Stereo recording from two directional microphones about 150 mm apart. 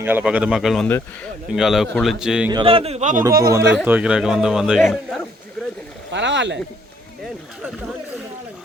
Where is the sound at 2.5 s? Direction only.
35° right (ahead or behind); by 3.2 s 55° right (ahead or behind).